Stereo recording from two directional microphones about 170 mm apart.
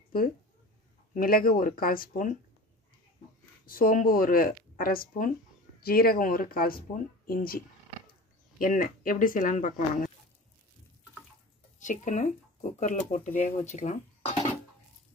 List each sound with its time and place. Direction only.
1.1 s speech: 55° left (ahead or behind)
3.6 s speech: 60° left (ahead or behind)
11.8 s speech: 50° left (ahead or behind)